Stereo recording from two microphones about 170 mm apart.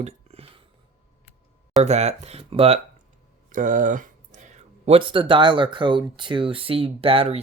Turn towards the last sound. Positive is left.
turn(degrees=-35)  # may be behind; listen again after turning